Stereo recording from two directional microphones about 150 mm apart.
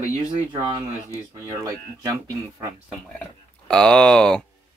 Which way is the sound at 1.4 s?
20° right (ahead or behind).